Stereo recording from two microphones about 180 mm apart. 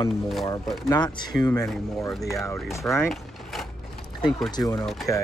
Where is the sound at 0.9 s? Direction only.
20° left (ahead or behind).